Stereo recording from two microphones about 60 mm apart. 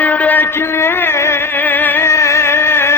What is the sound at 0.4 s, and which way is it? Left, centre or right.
Music, left.